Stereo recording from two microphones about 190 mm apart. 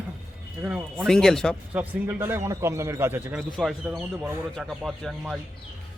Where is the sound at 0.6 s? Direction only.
5° right (ahead or behind).